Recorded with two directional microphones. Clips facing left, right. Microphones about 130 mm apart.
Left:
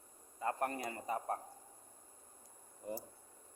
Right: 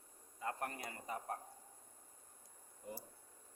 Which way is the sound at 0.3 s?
40° left (ahead or behind).